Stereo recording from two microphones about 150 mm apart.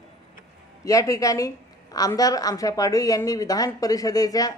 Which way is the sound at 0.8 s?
20° left (ahead or behind).